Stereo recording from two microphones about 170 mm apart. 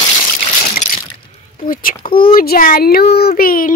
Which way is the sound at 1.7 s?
55° left (ahead or behind).